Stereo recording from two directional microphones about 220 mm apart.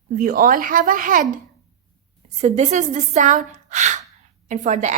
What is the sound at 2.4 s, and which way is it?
A woman's voice, 35° right (ahead or behind).